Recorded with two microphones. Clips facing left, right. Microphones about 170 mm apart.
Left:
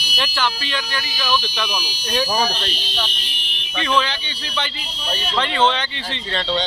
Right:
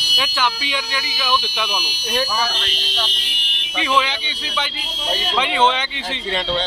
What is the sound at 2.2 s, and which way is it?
Speech, 45° left (ahead or behind).